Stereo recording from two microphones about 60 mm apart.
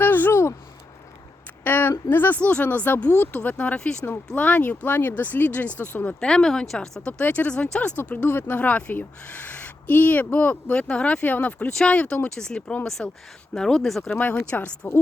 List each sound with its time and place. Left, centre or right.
0.0 s a sound: left
1.6 s a sound: left
2.4 s speech: left
6.1 s speech: centre
7.1 s speech: left
11.7 s speech: centre
13.5 s speech: centre
14.5 s a woman's voice: left